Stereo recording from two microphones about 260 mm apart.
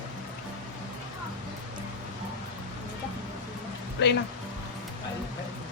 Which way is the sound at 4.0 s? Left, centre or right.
Left.